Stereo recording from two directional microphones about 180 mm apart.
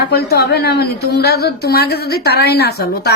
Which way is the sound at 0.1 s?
60° left (ahead or behind).